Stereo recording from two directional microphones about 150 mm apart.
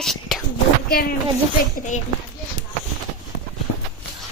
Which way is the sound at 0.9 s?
80° left.